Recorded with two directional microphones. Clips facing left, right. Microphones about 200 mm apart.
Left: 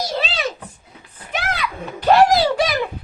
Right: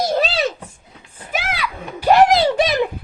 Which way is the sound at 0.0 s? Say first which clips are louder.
Right 5 dB; 50° right (ahead or behind).